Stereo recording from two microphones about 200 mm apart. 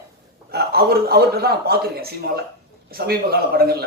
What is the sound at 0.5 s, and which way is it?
A man's voice, 50° right (ahead or behind).